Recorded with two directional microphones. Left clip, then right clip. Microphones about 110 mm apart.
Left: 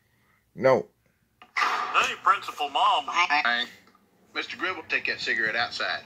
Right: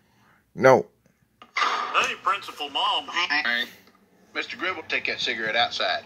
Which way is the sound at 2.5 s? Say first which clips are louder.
Left 2 dB; 20° right (ahead or behind).